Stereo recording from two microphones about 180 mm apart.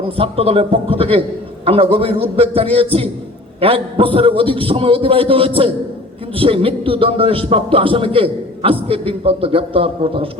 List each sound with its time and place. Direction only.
0.2 s speech: 30° right (ahead or behind)